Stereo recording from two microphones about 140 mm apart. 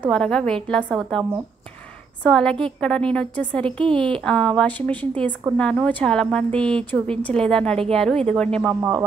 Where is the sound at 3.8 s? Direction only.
40° right (ahead or behind).